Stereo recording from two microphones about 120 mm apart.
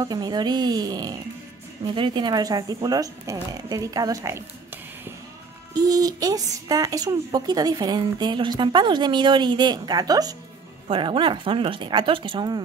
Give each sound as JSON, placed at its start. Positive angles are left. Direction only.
{"t": 0.0, "sound": "a woman's voice", "side_deg": -35}
{"t": 5.8, "sound": "a woman's voice", "side_deg": -30}
{"t": 10.9, "sound": "speech", "side_deg": -45}